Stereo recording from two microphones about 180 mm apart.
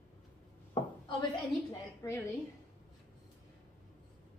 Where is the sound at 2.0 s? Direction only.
15° left (ahead or behind).